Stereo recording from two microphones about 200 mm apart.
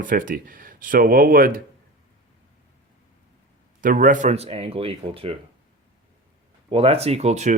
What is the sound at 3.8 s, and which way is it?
Speech, 40° right (ahead or behind).